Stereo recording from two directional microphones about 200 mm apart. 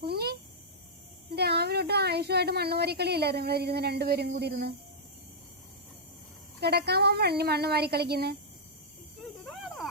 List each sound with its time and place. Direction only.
0.0 s a sound: 50° right (ahead or behind)
1.4 s speech: 55° right (ahead or behind)
6.6 s speech: 55° right (ahead or behind)
9.1 s cricket: centre (ahead or behind)